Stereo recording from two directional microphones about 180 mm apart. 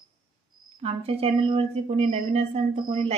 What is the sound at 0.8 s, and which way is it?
A woman's voice, 35° right (ahead or behind).